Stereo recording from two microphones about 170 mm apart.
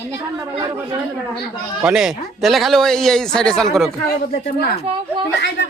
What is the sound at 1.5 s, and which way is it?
Speech, 5° right (ahead or behind).